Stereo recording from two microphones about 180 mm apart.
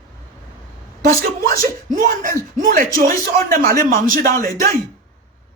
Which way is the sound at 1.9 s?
50° right (ahead or behind).